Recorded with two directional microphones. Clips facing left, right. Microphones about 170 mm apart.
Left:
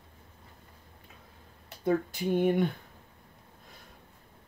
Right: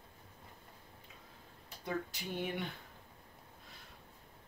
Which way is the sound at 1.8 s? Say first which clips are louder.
Left 12 dB; 50° left (ahead or behind).